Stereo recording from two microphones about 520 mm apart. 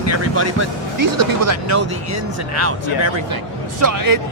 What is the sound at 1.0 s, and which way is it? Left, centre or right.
Speech, right.